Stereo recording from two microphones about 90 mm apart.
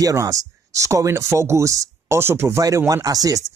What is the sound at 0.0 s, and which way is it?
Speech, 35° right (ahead or behind).